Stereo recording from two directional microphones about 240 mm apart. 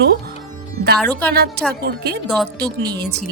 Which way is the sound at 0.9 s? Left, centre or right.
Centre.